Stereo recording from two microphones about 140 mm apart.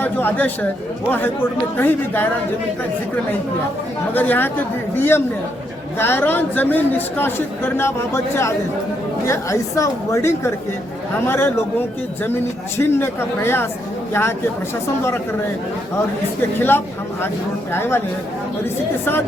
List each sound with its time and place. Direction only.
0.0 s a man's voice: 15° left (ahead or behind)
1.7 s a man's voice: 15° left (ahead or behind)
4.1 s a man's voice: 15° left (ahead or behind)
16.6 s a man's voice: 15° left (ahead or behind)